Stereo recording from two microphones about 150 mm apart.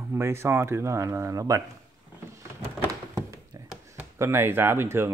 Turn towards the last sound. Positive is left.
turn(degrees=-15)  # may be behind; listen again after turning